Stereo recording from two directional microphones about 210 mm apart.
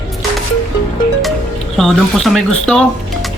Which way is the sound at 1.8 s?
Centre (ahead or behind).